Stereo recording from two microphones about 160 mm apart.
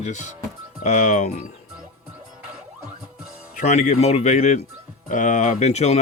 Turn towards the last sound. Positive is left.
turn(degrees=45)  # may be behind; listen again after turning